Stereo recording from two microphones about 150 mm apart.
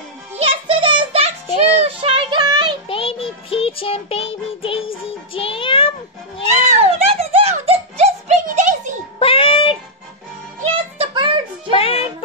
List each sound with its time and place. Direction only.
0.4 s music: 35° right (ahead or behind)
1.8 s child singing: 40° right (ahead or behind)
2.9 s music: 40° left (ahead or behind)
5.3 s child singing: 35° left (ahead or behind)
6.8 s a sound: 45° right (ahead or behind)
9.2 s music: 35° left (ahead or behind)
10.6 s music: 40° right (ahead or behind)
11.7 s music: 40° left (ahead or behind)